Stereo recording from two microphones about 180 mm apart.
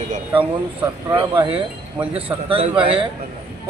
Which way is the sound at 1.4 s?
30° right (ahead or behind).